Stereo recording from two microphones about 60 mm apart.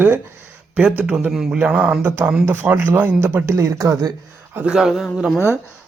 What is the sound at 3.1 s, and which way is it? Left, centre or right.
Speech, right.